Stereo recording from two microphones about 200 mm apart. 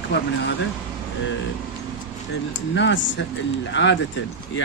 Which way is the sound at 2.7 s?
65° left (ahead or behind).